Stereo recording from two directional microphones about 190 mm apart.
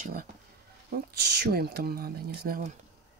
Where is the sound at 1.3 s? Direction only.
55° right (ahead or behind).